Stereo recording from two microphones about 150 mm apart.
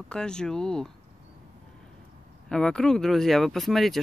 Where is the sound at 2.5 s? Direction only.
5° left (ahead or behind).